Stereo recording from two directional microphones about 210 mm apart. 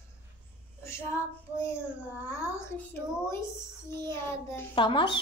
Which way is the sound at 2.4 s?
15° left (ahead or behind).